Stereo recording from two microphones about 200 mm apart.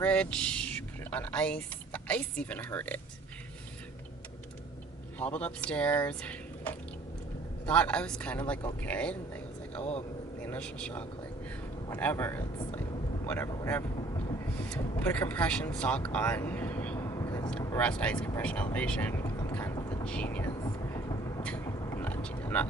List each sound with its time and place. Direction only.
0.0 s speech: 5° left (ahead or behind)
5.2 s a woman's voice: 5° left (ahead or behind)
17.2 s vehicle: 20° left (ahead or behind)
17.7 s speech: 5° left (ahead or behind)
18.3 s vehicle: 10° left (ahead or behind)
20.1 s a woman's voice: 5° left (ahead or behind)
20.5 s vehicle: 15° left (ahead or behind)